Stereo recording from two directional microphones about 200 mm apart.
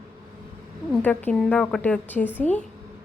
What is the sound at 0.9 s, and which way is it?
A woman's voice, 10° left (ahead or behind).